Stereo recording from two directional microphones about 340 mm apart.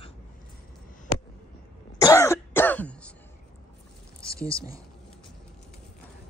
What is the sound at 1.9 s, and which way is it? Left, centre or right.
Throat clearing, centre.